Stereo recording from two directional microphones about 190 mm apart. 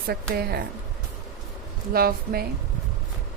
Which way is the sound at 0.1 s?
55° right (ahead or behind).